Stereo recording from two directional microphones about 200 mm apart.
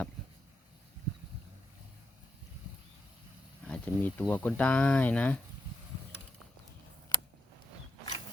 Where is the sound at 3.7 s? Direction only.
5° left (ahead or behind).